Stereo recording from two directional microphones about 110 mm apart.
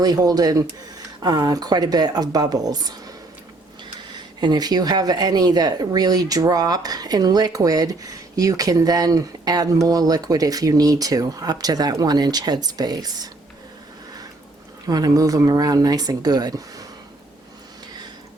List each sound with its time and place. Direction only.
0.0 s speech: 35° right (ahead or behind)
4.1 s speech: 40° right (ahead or behind)
14.8 s speech: 35° right (ahead or behind)